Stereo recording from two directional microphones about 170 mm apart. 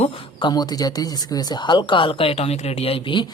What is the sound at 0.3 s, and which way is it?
Speech, 25° left (ahead or behind).